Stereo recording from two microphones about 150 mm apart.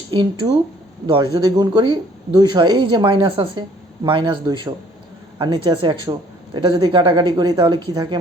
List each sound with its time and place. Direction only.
0.1 s speech: 35° right (ahead or behind)